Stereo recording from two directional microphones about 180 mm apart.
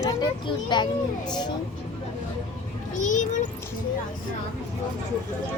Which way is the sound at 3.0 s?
45° left (ahead or behind).